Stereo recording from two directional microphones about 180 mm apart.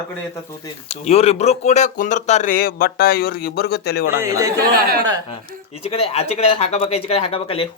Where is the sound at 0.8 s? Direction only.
35° left (ahead or behind); by 4.1 s 60° left (ahead or behind).